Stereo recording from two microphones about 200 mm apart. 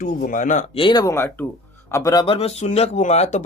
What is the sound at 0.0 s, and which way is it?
Speech, 45° left (ahead or behind).